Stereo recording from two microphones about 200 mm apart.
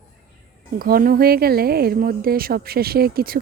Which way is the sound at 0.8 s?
45° right (ahead or behind).